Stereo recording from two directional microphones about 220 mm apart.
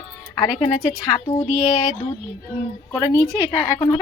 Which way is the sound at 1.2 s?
10° left (ahead or behind).